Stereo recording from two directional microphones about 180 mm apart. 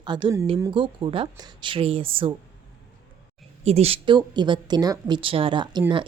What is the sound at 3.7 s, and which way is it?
A woman's voice, 35° right (ahead or behind).